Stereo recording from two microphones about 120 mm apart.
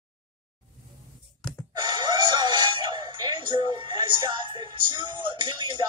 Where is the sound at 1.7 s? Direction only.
35° right (ahead or behind).